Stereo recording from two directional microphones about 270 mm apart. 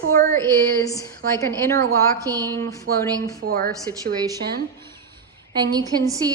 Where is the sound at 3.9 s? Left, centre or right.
Centre.